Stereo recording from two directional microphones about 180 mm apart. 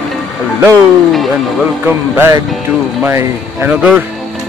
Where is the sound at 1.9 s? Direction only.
15° right (ahead or behind).